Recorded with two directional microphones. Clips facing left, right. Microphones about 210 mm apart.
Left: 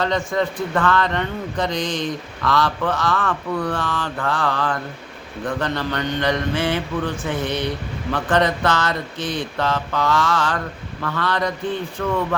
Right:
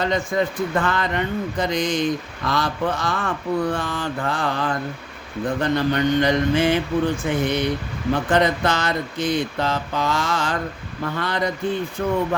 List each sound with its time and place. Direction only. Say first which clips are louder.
0.0 s a man's voice: even; 10° right (ahead or behind)
3.2 s speech: right 1 dB; 25° right (ahead or behind)
3.8 s a man's voice: even; 10° right (ahead or behind)